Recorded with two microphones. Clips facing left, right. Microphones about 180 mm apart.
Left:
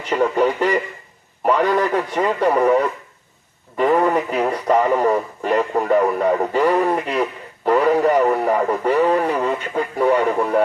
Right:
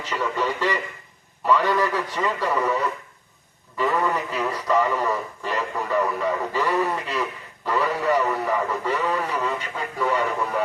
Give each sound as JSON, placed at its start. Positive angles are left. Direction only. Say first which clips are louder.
{"t": 0.0, "sound": "speech", "louder": "left 8 dB", "side_deg": 55}